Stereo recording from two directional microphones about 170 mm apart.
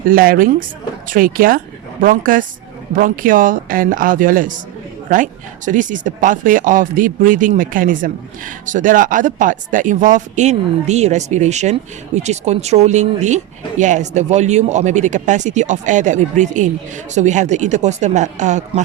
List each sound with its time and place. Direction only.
0.1 s a woman's voice: 55° right (ahead or behind)